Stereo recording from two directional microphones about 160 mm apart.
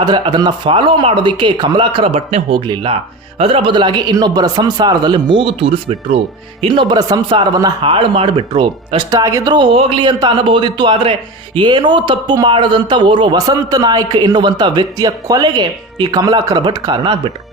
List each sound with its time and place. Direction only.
0.0 s a man's voice: 25° right (ahead or behind)